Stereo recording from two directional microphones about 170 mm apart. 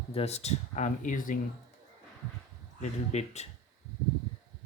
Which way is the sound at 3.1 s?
40° left (ahead or behind).